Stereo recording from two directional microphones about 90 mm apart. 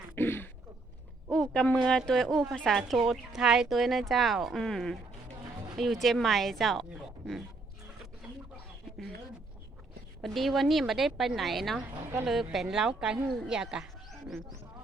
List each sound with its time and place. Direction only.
0.2 s throat clearing: 25° left (ahead or behind)
1.3 s speech: 5° left (ahead or behind)
10.2 s a woman's voice: centre (ahead or behind)
14.1 s a sound: 5° left (ahead or behind)